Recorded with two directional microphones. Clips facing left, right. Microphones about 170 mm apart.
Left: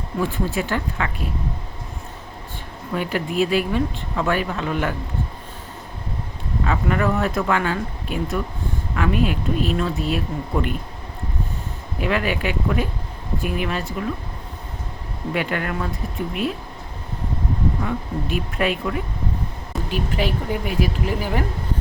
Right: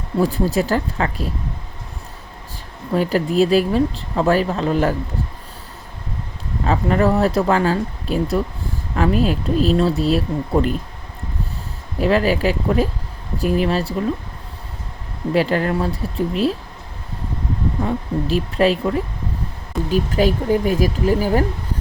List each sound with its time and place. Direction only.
0.2 s speech: 35° right (ahead or behind)
2.9 s speech: 35° right (ahead or behind)
6.7 s speech: 35° right (ahead or behind)
11.9 s speech: 35° right (ahead or behind)
15.3 s speech: 35° right (ahead or behind)
17.8 s speech: 30° right (ahead or behind)